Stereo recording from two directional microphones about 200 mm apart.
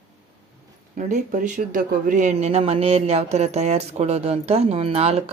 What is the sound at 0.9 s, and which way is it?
Speech, 40° right (ahead or behind).